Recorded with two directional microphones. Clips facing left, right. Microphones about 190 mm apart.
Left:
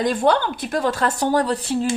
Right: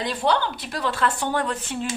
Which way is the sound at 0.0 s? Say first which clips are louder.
Left 5 dB; 50° left (ahead or behind).